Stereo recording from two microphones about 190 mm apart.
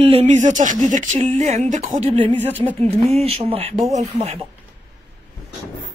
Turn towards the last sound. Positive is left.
turn(degrees=-35)  # may be behind; listen again after turning